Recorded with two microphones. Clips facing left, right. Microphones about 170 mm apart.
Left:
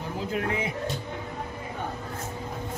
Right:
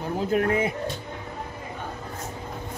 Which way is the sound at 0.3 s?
50° right (ahead or behind).